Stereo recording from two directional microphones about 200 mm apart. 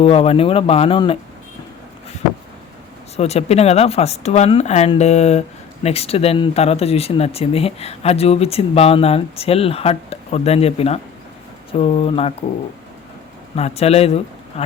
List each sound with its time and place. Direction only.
0.0 s speech: 30° left (ahead or behind)
3.2 s speech: 30° left (ahead or behind)
13.6 s a man's voice: 30° left (ahead or behind)